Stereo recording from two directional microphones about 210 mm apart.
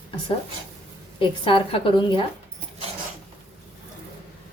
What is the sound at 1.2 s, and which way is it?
A woman's voice, 25° left (ahead or behind).